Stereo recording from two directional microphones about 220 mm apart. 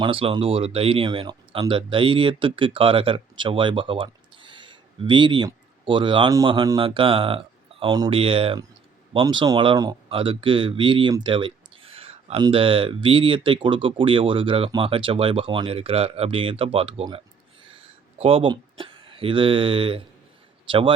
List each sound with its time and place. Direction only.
0.0 s speech: 25° right (ahead or behind)
17.7 s a sound: 25° right (ahead or behind)
20.7 s speech: 25° right (ahead or behind)